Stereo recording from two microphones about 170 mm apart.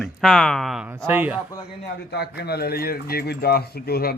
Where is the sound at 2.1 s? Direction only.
70° left (ahead or behind).